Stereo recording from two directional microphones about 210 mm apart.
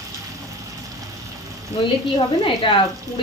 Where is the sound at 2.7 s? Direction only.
25° left (ahead or behind).